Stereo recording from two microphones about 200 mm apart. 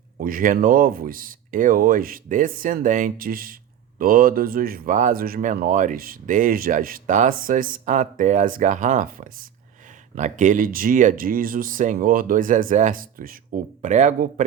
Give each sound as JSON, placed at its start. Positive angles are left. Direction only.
{"t": 0.2, "sound": "speech", "side_deg": -45}